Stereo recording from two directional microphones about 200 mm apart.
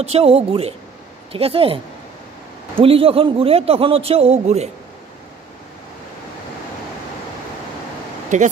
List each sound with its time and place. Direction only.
0.0 s a man's voice: 30° right (ahead or behind)
2.8 s a man's voice: 30° right (ahead or behind)
8.3 s a man's voice: 35° right (ahead or behind)